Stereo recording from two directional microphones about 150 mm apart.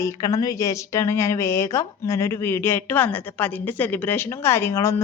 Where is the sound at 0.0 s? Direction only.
20° left (ahead or behind).